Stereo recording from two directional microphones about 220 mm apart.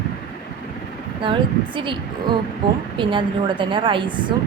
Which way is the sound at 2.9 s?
20° right (ahead or behind).